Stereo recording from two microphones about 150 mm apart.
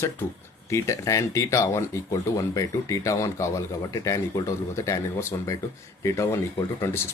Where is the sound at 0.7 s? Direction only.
20° left (ahead or behind).